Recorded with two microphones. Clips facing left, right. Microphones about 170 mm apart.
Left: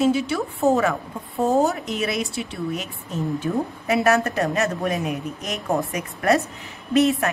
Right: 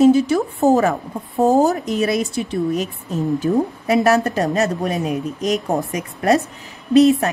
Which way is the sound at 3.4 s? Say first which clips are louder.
Right 6 dB; 35° right (ahead or behind).